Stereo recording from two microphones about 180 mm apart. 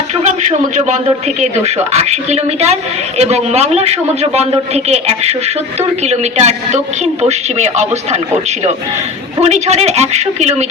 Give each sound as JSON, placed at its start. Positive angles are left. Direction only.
{"t": 0.2, "sound": "a man's voice", "side_deg": -40}
{"t": 9.4, "sound": "a woman's voice", "side_deg": -35}